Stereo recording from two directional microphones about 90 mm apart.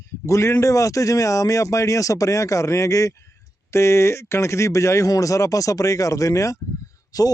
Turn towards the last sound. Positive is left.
turn(degrees=40)  # may be behind; listen again after turning